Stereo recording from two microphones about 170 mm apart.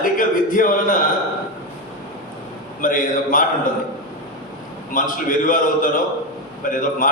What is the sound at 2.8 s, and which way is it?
Speech, 50° left (ahead or behind).